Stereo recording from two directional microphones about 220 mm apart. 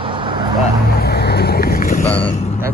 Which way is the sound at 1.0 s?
45° left (ahead or behind).